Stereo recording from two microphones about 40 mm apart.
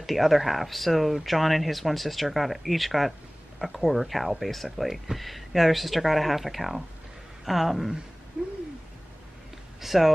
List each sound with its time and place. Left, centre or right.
0.0 s speech: centre
8.4 s owl: right
9.8 s speech: centre